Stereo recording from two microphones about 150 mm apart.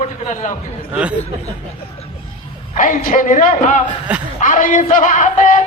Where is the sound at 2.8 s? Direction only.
65° left (ahead or behind).